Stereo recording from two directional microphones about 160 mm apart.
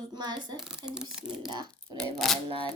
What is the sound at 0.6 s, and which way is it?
Speech, 5° right (ahead or behind).